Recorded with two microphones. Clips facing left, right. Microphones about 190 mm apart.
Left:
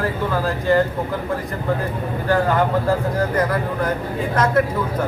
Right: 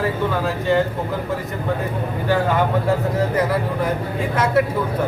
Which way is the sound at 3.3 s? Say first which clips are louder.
Even; 5° right (ahead or behind).